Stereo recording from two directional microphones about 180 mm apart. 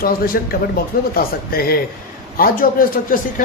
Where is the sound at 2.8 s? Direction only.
55° left (ahead or behind).